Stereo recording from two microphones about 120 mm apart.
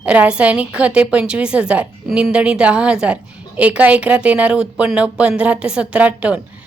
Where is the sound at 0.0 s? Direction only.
10° right (ahead or behind).